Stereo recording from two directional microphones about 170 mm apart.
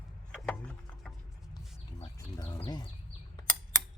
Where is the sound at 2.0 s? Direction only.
25° left (ahead or behind).